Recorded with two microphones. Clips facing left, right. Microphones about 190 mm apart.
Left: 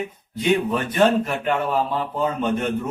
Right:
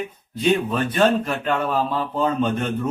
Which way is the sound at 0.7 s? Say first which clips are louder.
Even; 15° left (ahead or behind).